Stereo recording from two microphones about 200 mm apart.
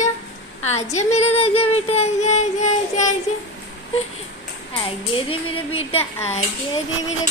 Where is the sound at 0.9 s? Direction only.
35° left (ahead or behind).